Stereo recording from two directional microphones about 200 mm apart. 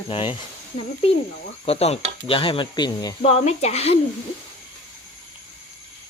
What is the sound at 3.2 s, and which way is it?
Speech, 30° left (ahead or behind).